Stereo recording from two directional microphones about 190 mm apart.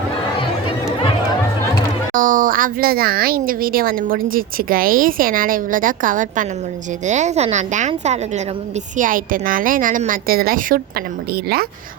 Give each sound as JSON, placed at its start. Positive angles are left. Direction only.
{"t": 2.1, "sound": "a woman's voice", "side_deg": -45}